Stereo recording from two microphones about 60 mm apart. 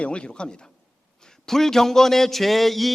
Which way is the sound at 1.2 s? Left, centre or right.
Centre.